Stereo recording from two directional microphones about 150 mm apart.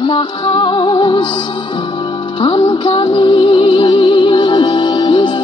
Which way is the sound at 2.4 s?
30° left (ahead or behind).